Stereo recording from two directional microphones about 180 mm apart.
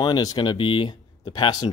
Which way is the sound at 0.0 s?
20° left (ahead or behind).